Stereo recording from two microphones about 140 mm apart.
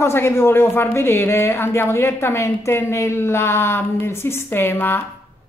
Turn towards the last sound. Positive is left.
turn(degrees=15)  # may be behind; listen again after turning